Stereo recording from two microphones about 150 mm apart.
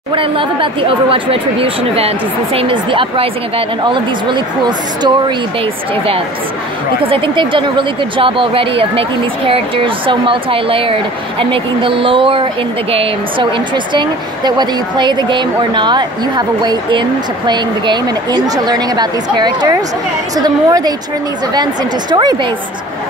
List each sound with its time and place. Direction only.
0.1 s speech: 35° right (ahead or behind)
7.0 s a woman's voice: 35° right (ahead or behind)
22.1 s a woman's voice: 25° right (ahead or behind)